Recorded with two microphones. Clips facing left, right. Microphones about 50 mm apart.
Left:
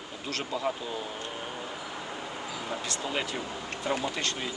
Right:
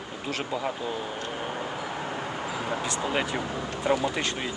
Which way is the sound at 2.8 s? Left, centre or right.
Centre.